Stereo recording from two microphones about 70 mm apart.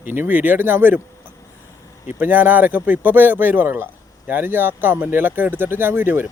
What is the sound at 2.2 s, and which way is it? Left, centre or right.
Speech, right.